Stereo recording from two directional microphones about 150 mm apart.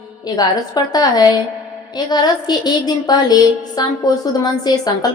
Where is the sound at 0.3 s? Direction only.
25° left (ahead or behind).